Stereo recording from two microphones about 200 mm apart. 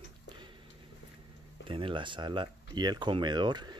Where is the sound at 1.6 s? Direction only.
25° right (ahead or behind).